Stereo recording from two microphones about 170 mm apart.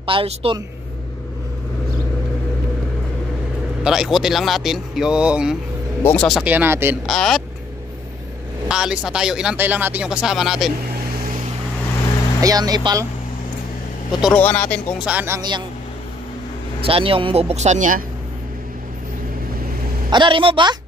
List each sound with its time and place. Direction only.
0.0 s speech: 35° right (ahead or behind)
3.8 s speech: 5° right (ahead or behind)
6.5 s speech: 10° right (ahead or behind)
7.1 s speech: centre (ahead or behind)
8.6 s speech: 5° right (ahead or behind)
12.4 s a man's voice: 20° right (ahead or behind)
14.3 s speech: 10° left (ahead or behind)
15.0 s speech: 10° right (ahead or behind)
16.8 s speech: 35° right (ahead or behind); by 18.0 s 50° right (ahead or behind)
20.1 s a man's voice: 30° right (ahead or behind)